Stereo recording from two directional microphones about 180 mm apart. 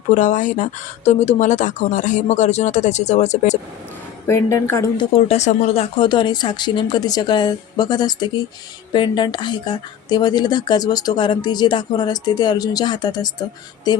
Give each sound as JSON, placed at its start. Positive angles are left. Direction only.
{"t": 0.1, "sound": "speech", "side_deg": 45}
{"t": 4.3, "sound": "a woman's voice", "side_deg": 15}
{"t": 4.9, "sound": "speech", "side_deg": 35}